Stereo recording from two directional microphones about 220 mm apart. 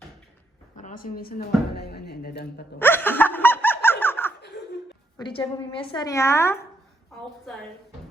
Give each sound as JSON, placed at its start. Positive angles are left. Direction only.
{"t": 0.8, "sound": "speech", "side_deg": 35}
{"t": 2.7, "sound": "snicker", "side_deg": 10}
{"t": 5.1, "sound": "a woman's voice", "side_deg": 20}